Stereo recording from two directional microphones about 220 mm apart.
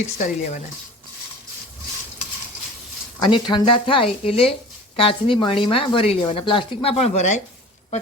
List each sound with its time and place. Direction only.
0.2 s speech: 35° left (ahead or behind)
3.2 s a woman's voice: 20° left (ahead or behind)